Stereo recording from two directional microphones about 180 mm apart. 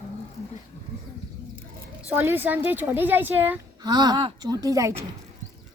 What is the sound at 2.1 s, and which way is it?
A woman's voice, 10° right (ahead or behind).